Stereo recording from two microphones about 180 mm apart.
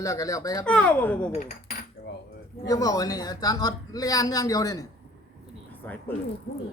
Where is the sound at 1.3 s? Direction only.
45° left (ahead or behind).